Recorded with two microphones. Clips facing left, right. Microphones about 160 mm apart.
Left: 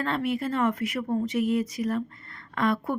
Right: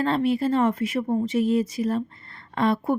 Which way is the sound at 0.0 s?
30° right (ahead or behind).